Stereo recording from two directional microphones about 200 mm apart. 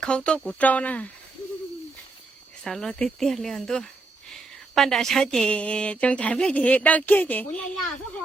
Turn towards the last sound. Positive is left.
turn(degrees=10)  # may be behind; listen again after turning